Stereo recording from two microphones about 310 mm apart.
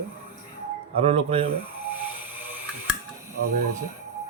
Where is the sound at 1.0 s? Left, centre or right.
Centre.